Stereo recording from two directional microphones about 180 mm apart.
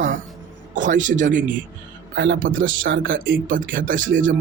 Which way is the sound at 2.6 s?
90° right.